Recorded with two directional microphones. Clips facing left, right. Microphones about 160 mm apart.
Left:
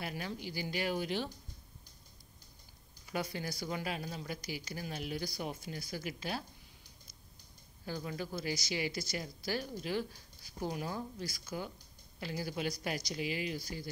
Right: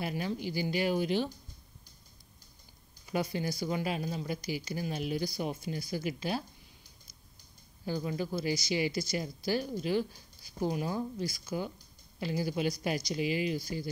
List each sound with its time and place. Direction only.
0.5 s speech: 25° right (ahead or behind)
3.1 s speech: 20° right (ahead or behind)
7.8 s speech: 15° right (ahead or behind)